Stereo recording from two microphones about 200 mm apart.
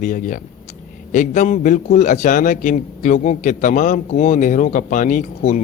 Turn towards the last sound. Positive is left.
turn(degrees=40)  # may be behind; listen again after turning